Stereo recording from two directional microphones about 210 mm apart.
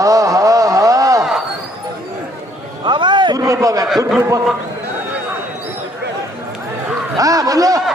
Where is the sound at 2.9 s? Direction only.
20° right (ahead or behind).